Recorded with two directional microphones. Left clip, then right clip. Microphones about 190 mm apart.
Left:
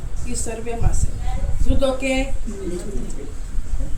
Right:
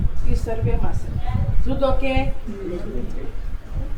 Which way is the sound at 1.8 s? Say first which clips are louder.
Even; 25° left (ahead or behind).